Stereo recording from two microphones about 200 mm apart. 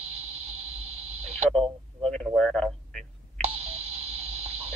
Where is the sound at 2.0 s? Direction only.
5° left (ahead or behind).